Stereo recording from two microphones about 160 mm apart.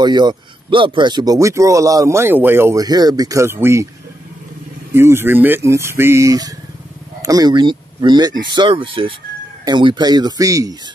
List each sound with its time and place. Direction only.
0.0 s speech: 25° right (ahead or behind)
4.9 s speech: 15° right (ahead or behind)